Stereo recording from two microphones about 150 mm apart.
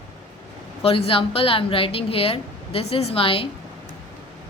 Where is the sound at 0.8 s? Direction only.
40° left (ahead or behind).